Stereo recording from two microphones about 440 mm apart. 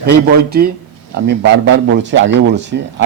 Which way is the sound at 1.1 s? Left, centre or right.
Right.